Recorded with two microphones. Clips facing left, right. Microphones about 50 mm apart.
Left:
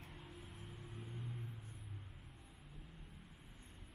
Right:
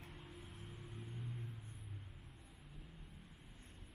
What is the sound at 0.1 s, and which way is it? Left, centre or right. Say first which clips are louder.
Music: even; centre.